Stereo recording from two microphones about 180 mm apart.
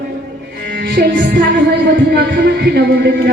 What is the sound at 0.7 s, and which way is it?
Music, 50° right (ahead or behind).